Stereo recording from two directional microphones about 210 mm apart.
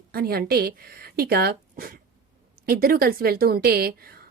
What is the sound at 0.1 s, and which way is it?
Speech, 45° right (ahead or behind).